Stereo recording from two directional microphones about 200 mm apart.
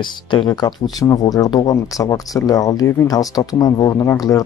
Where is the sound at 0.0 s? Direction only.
25° left (ahead or behind).